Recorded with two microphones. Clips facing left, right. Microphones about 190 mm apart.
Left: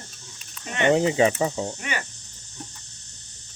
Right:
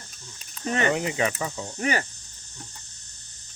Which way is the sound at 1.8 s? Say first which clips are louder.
Right 6 dB; 40° right (ahead or behind).